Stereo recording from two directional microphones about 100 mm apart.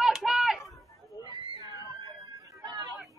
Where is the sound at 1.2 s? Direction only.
45° left (ahead or behind).